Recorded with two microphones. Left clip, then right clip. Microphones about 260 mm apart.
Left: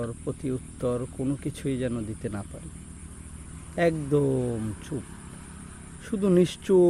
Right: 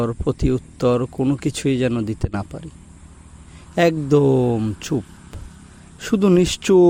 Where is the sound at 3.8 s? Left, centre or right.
Right.